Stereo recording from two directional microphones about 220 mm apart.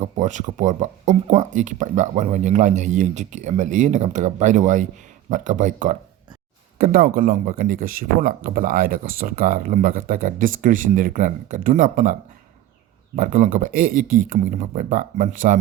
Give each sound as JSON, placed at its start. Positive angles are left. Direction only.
{"t": 0.0, "sound": "speech", "side_deg": -35}
{"t": 13.1, "sound": "speech", "side_deg": -35}